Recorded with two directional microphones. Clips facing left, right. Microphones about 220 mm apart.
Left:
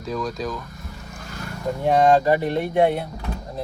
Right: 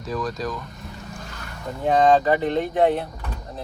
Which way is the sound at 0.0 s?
Centre (ahead or behind).